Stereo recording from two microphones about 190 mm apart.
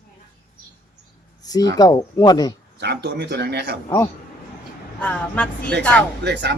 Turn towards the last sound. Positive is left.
turn(degrees=-65)  # may be behind; listen again after turning